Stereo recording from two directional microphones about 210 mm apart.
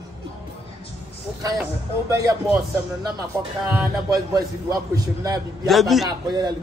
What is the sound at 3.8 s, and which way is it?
A man's voice, 15° right (ahead or behind).